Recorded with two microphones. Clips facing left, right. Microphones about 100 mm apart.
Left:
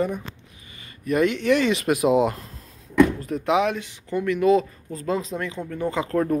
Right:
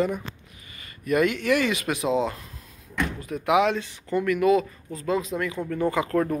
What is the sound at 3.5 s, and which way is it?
Speech, 20° left (ahead or behind).